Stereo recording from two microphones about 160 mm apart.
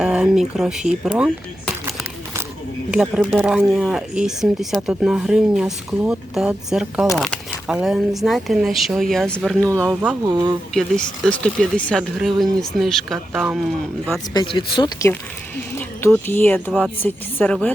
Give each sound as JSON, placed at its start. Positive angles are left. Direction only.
{"t": 0.0, "sound": "speech", "side_deg": -5}
{"t": 3.2, "sound": "speech", "side_deg": 0}
{"t": 9.9, "sound": "speech", "side_deg": -10}
{"t": 10.2, "sound": "speech", "side_deg": -25}
{"t": 10.8, "sound": "speech", "side_deg": 5}
{"t": 14.3, "sound": "speech", "side_deg": 30}
{"t": 16.1, "sound": "speech", "side_deg": 10}